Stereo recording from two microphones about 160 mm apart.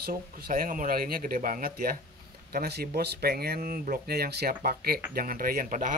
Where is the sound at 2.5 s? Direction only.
75° right (ahead or behind).